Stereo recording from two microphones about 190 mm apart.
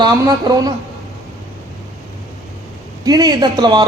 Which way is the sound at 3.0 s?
20° right (ahead or behind).